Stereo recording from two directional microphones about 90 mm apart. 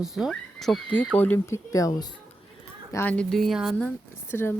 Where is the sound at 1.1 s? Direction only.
20° left (ahead or behind).